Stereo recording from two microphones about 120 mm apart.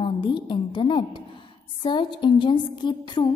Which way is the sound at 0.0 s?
40° left (ahead or behind).